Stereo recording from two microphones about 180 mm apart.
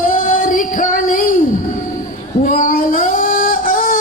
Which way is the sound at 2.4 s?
50° left (ahead or behind).